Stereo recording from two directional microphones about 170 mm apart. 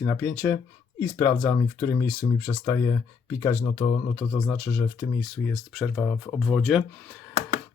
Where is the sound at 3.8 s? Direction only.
30° left (ahead or behind).